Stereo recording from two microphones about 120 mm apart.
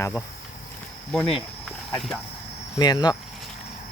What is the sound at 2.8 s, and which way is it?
Speech, 35° left (ahead or behind).